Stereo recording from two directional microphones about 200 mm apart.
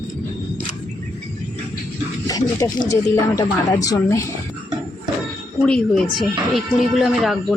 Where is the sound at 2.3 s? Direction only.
20° left (ahead or behind).